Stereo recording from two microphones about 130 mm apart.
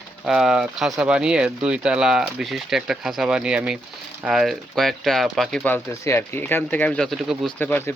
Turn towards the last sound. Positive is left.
turn(degrees=15)  # may be behind; listen again after turning